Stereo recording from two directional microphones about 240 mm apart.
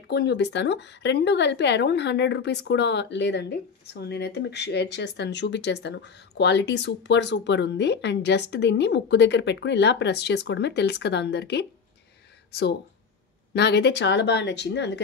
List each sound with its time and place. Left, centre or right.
0.1 s speech: left
13.5 s speech: left